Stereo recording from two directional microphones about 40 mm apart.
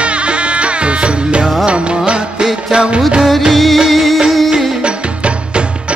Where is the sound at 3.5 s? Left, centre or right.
Centre.